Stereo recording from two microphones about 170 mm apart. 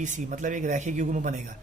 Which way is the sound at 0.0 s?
50° right (ahead or behind).